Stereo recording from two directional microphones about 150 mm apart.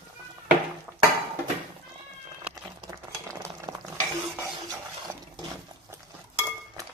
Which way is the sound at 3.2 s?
20° right (ahead or behind).